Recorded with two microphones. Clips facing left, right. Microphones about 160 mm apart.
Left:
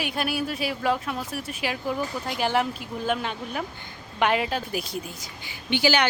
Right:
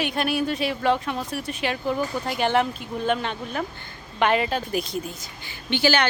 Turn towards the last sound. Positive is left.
turn(degrees=15)  # may be behind; listen again after turning